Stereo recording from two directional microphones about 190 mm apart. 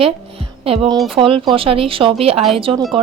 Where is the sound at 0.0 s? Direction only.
30° right (ahead or behind).